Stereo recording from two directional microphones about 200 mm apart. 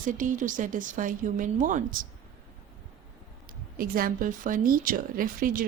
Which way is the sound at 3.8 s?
45° right (ahead or behind).